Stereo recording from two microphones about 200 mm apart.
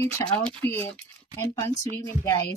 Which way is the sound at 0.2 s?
15° left (ahead or behind).